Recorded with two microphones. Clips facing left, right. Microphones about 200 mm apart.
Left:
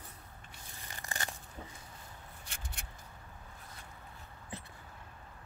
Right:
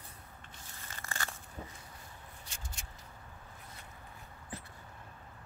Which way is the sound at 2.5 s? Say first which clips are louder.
Left 2 dB; 60° left (ahead or behind).